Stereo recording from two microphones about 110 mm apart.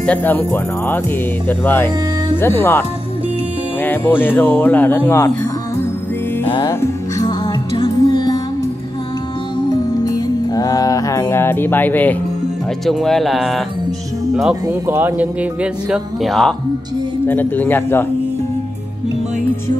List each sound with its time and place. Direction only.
0.0 s speech: 15° left (ahead or behind)
3.8 s speech: 20° left (ahead or behind)
6.6 s music: 30° left (ahead or behind)
7.2 s music: 45° left (ahead or behind)
9.7 s music: 35° left (ahead or behind); by 12.2 s 15° left (ahead or behind)
12.8 s speech: centre (ahead or behind)
14.5 s speech: 20° right (ahead or behind); by 16.5 s centre (ahead or behind)
17.3 s speech: 15° left (ahead or behind)